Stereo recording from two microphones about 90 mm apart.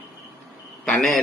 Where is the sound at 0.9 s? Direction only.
5° left (ahead or behind).